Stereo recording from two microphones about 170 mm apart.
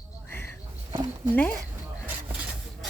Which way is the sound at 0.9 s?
30° right (ahead or behind).